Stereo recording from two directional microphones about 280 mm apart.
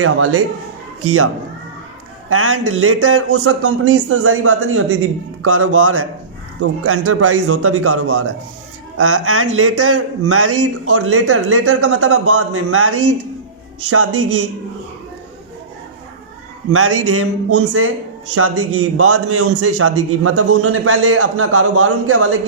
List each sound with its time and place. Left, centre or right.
0.0 s a man's voice: right
2.3 s a man's voice: right
16.7 s a man's voice: right